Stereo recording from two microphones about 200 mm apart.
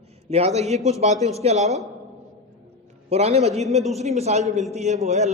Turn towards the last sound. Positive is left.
turn(degrees=-35)  # may be behind; listen again after turning